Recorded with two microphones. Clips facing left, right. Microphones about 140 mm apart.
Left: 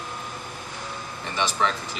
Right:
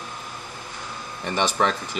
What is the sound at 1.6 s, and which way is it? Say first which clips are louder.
Speech: right 3 dB; 55° right (ahead or behind).